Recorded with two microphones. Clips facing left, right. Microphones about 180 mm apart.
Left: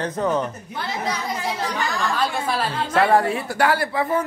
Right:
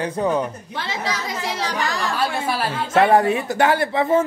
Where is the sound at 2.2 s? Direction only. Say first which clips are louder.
Right 2 dB; 10° right (ahead or behind).